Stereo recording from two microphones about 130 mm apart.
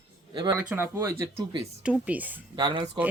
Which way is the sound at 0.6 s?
20° right (ahead or behind).